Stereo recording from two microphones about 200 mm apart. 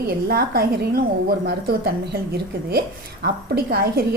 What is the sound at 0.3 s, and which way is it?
A woman's voice, 50° right (ahead or behind).